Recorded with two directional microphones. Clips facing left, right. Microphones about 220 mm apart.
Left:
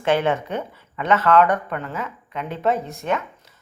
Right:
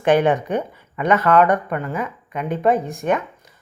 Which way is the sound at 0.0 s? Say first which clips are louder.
Right 4 dB; 15° right (ahead or behind).